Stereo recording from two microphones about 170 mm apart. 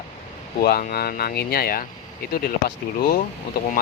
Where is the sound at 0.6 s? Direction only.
65° left (ahead or behind).